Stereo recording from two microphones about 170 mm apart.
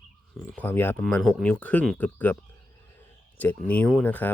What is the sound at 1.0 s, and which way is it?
Speech, centre (ahead or behind).